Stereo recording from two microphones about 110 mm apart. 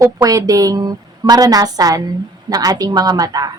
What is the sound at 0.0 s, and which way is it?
Speech, 30° right (ahead or behind).